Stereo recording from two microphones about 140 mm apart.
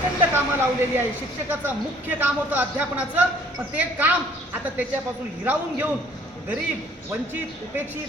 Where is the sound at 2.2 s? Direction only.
10° right (ahead or behind).